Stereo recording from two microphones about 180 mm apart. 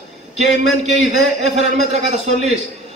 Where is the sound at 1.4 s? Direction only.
40° right (ahead or behind).